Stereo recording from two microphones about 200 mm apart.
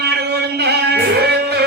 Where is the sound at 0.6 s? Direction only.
55° right (ahead or behind).